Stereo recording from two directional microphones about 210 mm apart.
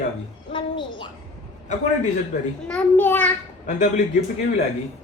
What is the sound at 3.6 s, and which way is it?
Speech, 35° left (ahead or behind).